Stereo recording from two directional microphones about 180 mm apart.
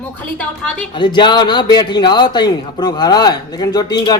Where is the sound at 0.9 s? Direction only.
25° left (ahead or behind).